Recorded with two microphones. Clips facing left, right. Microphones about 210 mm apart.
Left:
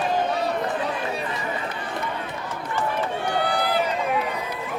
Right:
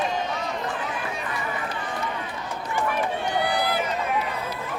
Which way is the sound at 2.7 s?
10° right (ahead or behind).